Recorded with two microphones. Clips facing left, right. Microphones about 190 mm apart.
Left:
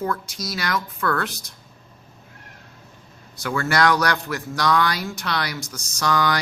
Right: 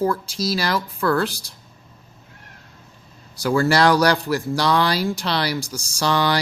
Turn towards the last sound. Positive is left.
turn(degrees=-30)  # may be behind; listen again after turning